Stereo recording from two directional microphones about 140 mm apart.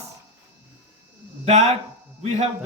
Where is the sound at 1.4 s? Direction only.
55° right (ahead or behind).